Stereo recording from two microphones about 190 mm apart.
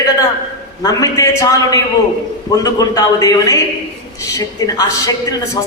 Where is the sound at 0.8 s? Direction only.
20° left (ahead or behind).